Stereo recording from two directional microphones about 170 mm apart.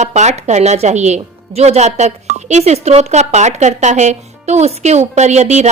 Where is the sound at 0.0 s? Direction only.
40° right (ahead or behind).